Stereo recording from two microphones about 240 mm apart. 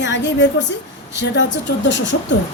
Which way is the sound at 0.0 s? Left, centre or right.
Left.